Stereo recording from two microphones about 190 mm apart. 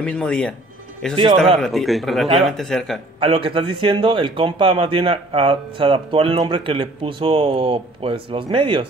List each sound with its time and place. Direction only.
0.0 s speech: 5° left (ahead or behind)
3.2 s speech: 30° right (ahead or behind)